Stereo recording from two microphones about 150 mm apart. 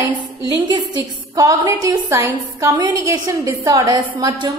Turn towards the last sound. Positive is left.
turn(degrees=-25)  # may be behind; listen again after turning